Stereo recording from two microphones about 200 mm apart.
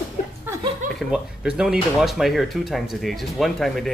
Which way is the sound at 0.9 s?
Centre (ahead or behind).